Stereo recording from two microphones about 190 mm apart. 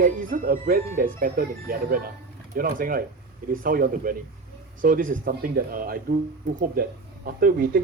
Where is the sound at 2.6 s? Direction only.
45° right (ahead or behind).